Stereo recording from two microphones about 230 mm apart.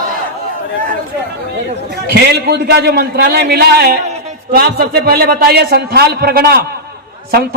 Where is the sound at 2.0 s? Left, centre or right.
Right.